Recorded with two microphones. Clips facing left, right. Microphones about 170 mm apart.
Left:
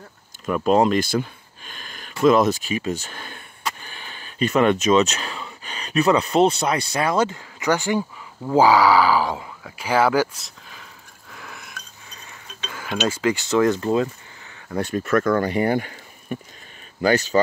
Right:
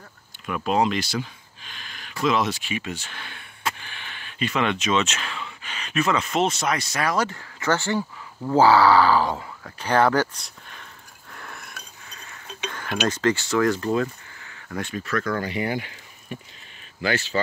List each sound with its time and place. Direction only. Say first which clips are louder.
0.5 s speech: left 5 dB; 40° left (ahead or behind)
4.4 s speech: left 6 dB; 45° left (ahead or behind); by 10.9 s 5° left (ahead or behind)
11.3 s a sound: left 1 dB; centre (ahead or behind)
13.1 s speech: left 2 dB; 15° left (ahead or behind)
14.0 s a sound: left 2 dB; 10° left (ahead or behind)
14.8 s speech: left 7 dB; 45° left (ahead or behind)